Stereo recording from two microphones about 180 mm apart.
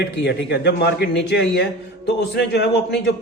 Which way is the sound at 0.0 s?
70° left (ahead or behind).